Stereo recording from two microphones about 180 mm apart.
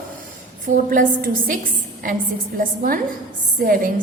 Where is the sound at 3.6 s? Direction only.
50° right (ahead or behind).